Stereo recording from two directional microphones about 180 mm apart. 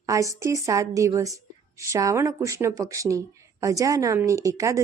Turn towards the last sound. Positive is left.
turn(degrees=-20)  # may be behind; listen again after turning